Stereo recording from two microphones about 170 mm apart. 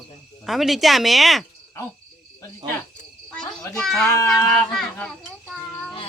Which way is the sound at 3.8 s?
5° left (ahead or behind).